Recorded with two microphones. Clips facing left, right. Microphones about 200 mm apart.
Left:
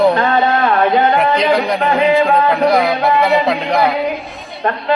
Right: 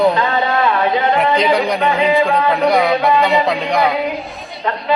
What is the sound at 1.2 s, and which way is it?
A man's voice, centre (ahead or behind).